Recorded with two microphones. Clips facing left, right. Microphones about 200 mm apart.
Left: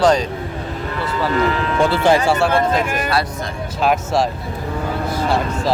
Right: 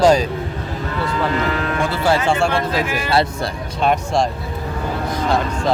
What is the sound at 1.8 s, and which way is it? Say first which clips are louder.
Speech: left 4 dB; 20° left (ahead or behind).